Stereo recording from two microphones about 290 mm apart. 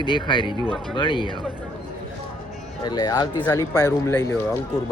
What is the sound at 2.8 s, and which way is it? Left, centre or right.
Speech, centre.